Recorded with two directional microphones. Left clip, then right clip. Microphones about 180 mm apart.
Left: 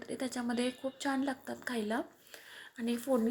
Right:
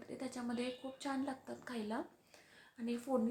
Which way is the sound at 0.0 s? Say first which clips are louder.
Left 7 dB; 25° left (ahead or behind).